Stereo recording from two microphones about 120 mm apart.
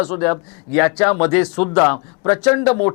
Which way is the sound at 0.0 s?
20° left (ahead or behind).